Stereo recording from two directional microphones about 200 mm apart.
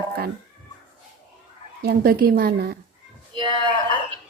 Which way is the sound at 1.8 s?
50° right (ahead or behind).